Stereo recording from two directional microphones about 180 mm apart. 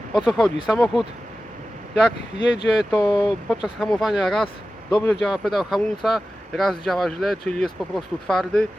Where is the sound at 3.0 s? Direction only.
20° left (ahead or behind).